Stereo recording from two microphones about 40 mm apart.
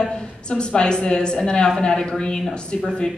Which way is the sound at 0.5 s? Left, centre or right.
Left.